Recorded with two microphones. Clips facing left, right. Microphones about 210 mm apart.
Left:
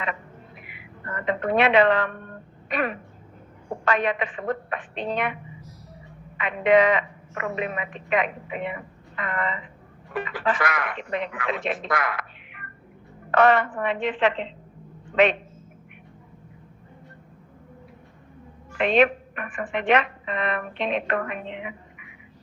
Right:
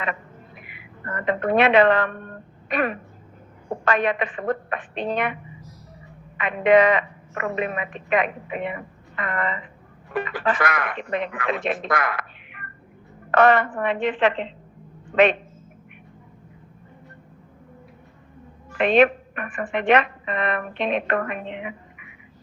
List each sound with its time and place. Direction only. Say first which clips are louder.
0.7 s a woman's voice: right 2 dB; 50° right (ahead or behind)
6.3 s a woman's voice: right 2 dB; 50° right (ahead or behind)
18.7 s a woman's voice: right 3 dB; 55° right (ahead or behind)